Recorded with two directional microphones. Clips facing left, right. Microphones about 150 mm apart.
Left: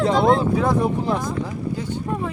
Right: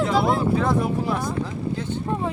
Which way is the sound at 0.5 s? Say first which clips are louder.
Left 2 dB; 15° left (ahead or behind).